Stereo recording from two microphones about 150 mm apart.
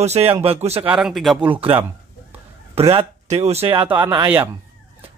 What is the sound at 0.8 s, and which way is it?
Speech, 5° right (ahead or behind).